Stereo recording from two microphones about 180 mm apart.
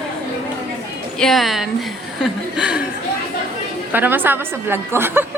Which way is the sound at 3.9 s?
10° right (ahead or behind).